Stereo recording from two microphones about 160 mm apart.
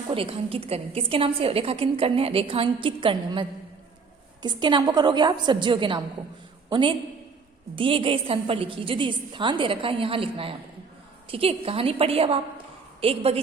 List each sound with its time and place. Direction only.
0.1 s a woman's voice: 35° right (ahead or behind)
4.4 s a woman's voice: 30° right (ahead or behind)